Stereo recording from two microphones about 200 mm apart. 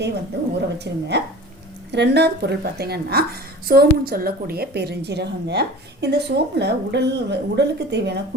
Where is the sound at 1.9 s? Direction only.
55° right (ahead or behind).